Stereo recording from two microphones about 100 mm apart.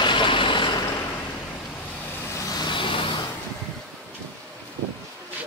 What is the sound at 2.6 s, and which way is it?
Vehicle, 55° left (ahead or behind).